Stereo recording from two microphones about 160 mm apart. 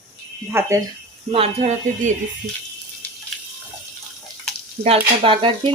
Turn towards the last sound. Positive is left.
turn(degrees=-35)  # may be behind; listen again after turning